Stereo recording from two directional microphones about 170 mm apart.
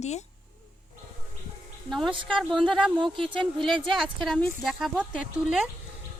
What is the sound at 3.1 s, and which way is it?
Speech, 30° right (ahead or behind).